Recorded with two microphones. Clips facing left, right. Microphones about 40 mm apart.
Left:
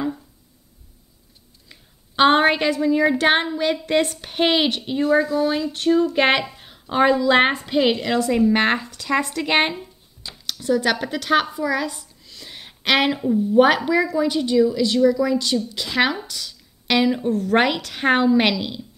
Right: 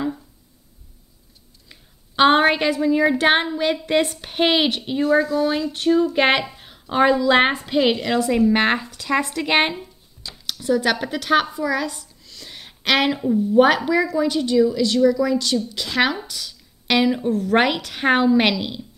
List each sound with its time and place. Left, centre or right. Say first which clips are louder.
1.7 s a woman's voice: even; centre